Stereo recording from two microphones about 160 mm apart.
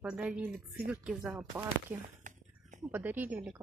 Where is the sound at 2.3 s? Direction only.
50° right (ahead or behind).